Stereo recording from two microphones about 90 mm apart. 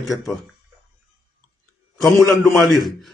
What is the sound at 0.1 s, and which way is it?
Speech, 40° left (ahead or behind).